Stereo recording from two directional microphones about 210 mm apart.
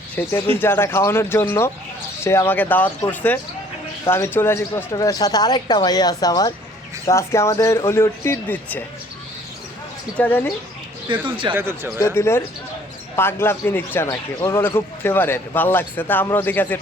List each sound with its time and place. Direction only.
0.2 s speech: 10° left (ahead or behind)
10.2 s speech: 5° left (ahead or behind)
11.1 s speech: 20° right (ahead or behind)
11.5 s speech: 10° right (ahead or behind)
11.9 s speech: 15° left (ahead or behind)